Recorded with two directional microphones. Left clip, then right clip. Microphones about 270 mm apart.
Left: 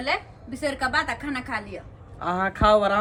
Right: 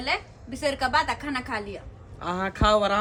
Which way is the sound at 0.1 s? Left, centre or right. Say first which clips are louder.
Even; centre.